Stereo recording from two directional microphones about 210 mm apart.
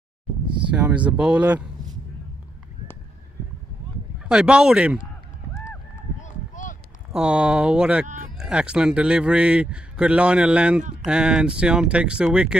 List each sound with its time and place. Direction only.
0.7 s a man's voice: 5° right (ahead or behind)
4.2 s a man's voice: 5° right (ahead or behind)
6.2 s a sound: 35° left (ahead or behind)
7.1 s a man's voice: 5° right (ahead or behind)